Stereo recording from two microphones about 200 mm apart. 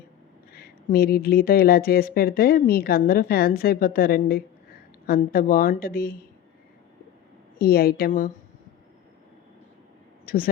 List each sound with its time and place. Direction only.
0.5 s speech: 50° left (ahead or behind)
7.6 s speech: 50° left (ahead or behind)
10.2 s a woman's voice: 45° left (ahead or behind)